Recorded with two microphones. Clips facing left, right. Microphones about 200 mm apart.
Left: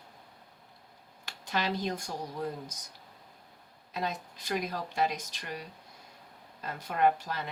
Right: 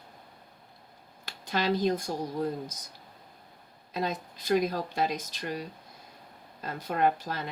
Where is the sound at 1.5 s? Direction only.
35° right (ahead or behind).